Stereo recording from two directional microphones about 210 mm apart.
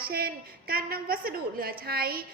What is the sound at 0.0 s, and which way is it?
A woman's voice, 45° right (ahead or behind).